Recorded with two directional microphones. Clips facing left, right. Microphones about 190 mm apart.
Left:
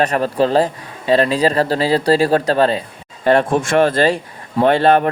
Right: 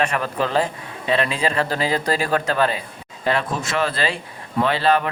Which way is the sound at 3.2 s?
50° left (ahead or behind).